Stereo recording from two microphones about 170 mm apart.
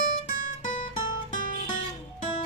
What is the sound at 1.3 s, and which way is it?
Music, 55° left (ahead or behind).